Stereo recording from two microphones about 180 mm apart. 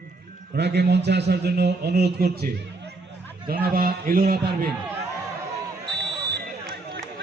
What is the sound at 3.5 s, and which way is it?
A man's voice, 55° right (ahead or behind).